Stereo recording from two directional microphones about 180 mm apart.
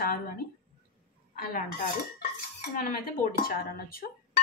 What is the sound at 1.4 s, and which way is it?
Speech, 55° left (ahead or behind).